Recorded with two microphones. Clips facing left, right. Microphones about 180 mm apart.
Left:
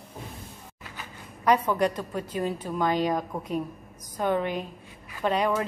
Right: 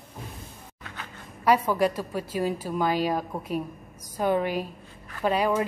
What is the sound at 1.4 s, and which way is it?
A woman's voice, 10° right (ahead or behind).